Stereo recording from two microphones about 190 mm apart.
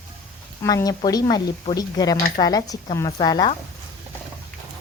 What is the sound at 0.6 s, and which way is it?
Speech, 15° left (ahead or behind).